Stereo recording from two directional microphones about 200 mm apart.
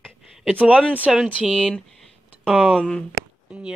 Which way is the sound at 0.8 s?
5° left (ahead or behind).